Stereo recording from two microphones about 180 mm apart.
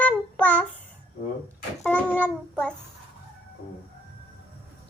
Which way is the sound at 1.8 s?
5° left (ahead or behind).